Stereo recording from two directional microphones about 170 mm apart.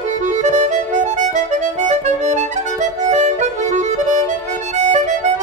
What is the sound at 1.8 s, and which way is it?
Music, 45° right (ahead or behind).